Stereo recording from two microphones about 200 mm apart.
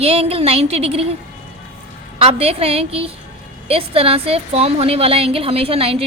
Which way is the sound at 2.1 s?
30° right (ahead or behind).